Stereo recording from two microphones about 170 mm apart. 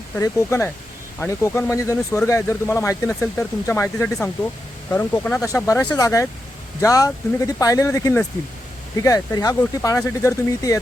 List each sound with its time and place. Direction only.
0.2 s speech: 15° left (ahead or behind)